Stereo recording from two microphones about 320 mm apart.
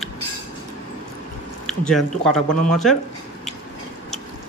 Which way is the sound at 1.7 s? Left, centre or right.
Centre.